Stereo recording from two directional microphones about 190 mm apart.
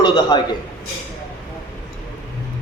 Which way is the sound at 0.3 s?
20° left (ahead or behind).